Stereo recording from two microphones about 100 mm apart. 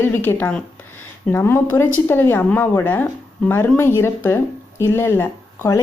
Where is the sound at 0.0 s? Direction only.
20° left (ahead or behind).